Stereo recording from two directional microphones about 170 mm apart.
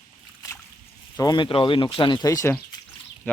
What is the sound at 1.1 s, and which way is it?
Speech, 25° left (ahead or behind).